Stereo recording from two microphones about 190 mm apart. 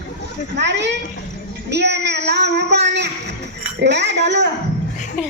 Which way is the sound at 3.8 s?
65° right (ahead or behind).